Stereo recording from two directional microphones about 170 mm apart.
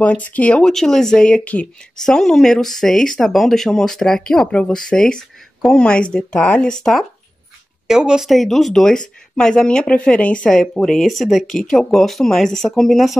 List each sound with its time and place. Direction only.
0.0 s speech: 10° left (ahead or behind)